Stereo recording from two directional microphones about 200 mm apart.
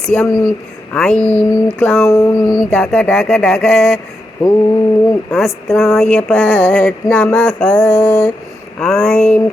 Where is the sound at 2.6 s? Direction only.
5° left (ahead or behind).